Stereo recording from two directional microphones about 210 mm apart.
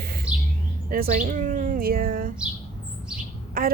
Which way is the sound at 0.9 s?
40° right (ahead or behind).